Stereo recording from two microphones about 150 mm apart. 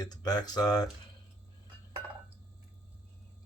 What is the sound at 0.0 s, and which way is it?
Speech, 25° left (ahead or behind).